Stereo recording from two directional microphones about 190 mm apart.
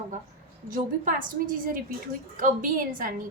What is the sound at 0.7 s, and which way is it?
A woman's voice, 45° right (ahead or behind).